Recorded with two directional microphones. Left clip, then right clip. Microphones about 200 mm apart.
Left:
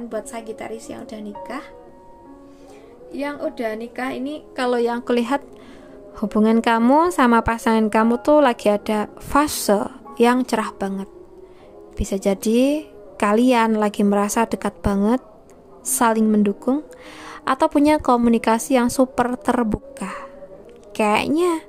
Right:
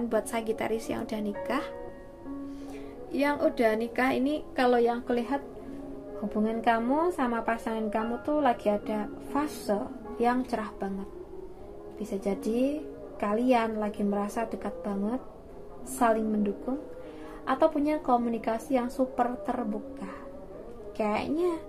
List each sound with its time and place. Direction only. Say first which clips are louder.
0.1 s speech: even; 5° right (ahead or behind)
3.1 s a woman's voice: even; centre (ahead or behind)
4.6 s a woman's voice: left 4 dB; 25° left (ahead or behind)
5.0 s a child's voice: left 9 dB; 40° left (ahead or behind)
12.1 s a woman's voice: left 11 dB; 45° left (ahead or behind)